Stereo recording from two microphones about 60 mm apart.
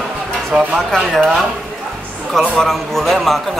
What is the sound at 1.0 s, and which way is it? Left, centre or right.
Speech, centre.